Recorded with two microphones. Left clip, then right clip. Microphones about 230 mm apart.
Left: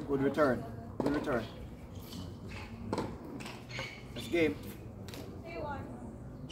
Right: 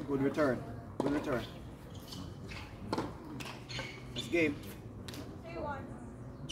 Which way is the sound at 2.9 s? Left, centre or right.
Right.